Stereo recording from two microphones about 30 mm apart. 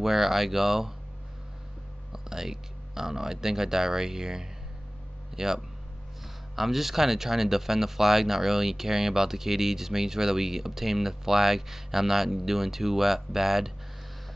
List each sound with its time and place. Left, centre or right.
0.0 s speech: centre
2.1 s speech: centre